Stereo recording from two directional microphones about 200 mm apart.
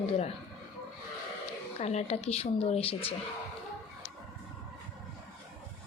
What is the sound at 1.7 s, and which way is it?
Speech, 30° left (ahead or behind).